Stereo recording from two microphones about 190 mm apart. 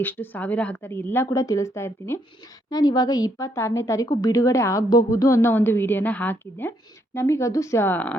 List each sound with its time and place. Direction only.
0.0 s a woman's voice: 10° left (ahead or behind)